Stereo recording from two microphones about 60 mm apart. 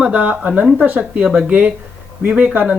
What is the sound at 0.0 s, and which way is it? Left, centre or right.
Speech, right.